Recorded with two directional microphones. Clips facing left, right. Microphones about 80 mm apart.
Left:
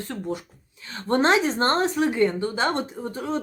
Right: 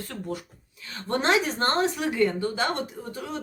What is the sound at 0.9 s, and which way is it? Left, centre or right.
A woman's voice, left.